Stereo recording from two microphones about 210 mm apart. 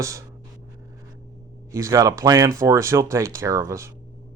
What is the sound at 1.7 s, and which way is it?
Speech, 15° right (ahead or behind).